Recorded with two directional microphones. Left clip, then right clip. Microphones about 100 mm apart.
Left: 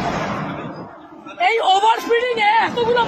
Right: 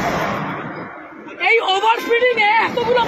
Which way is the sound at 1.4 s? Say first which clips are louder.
Even; 35° left (ahead or behind).